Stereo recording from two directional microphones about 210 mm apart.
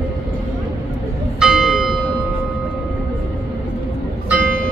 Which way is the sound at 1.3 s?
Centre (ahead or behind).